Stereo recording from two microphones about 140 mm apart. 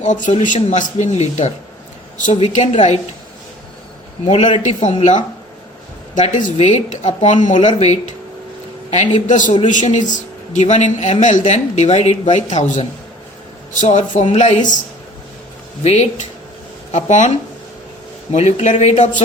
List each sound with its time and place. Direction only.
0.0 s a man's voice: 60° left (ahead or behind)
4.3 s a man's voice: 55° left (ahead or behind)
9.5 s a man's voice: 40° left (ahead or behind)
10.5 s a man's voice: 55° left (ahead or behind)
13.8 s a man's voice: 60° left (ahead or behind)
15.8 s a man's voice: 50° left (ahead or behind)